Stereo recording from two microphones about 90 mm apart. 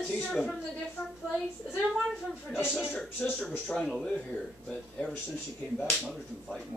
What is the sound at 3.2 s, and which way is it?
Speech, 20° left (ahead or behind).